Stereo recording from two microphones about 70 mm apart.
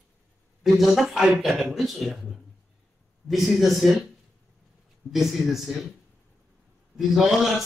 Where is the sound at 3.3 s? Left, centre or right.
Centre.